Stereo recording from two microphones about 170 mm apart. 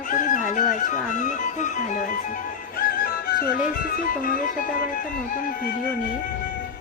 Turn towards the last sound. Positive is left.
turn(degrees=50)  # may be behind; listen again after turning